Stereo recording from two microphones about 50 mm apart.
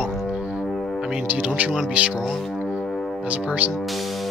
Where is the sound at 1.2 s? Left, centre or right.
Right.